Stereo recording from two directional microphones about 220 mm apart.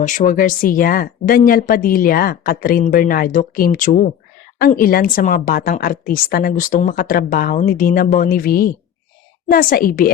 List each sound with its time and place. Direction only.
0.0 s a woman's voice: 35° left (ahead or behind)